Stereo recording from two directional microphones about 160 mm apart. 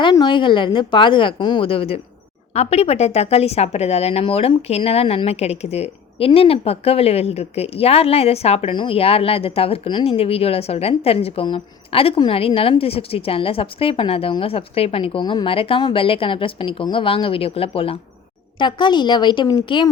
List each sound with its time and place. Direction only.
0.0 s a woman's voice: 30° left (ahead or behind)